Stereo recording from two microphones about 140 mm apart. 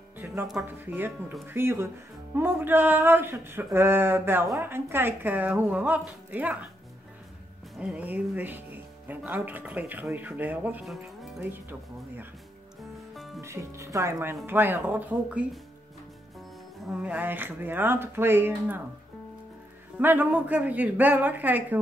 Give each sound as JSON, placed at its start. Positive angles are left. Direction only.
{"t": 0.2, "sound": "music", "side_deg": -15}
{"t": 0.6, "sound": "speech", "side_deg": -15}
{"t": 7.7, "sound": "speech", "side_deg": -10}
{"t": 10.9, "sound": "speech", "side_deg": 0}
{"t": 11.3, "sound": "speech", "side_deg": -15}
{"t": 13.1, "sound": "music", "side_deg": 0}
{"t": 13.4, "sound": "speech", "side_deg": -20}
{"t": 16.8, "sound": "speech", "side_deg": -5}
{"t": 20.0, "sound": "speech", "side_deg": -15}